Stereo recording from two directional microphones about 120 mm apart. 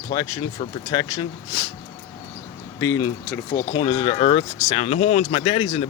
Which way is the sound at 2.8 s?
30° left (ahead or behind).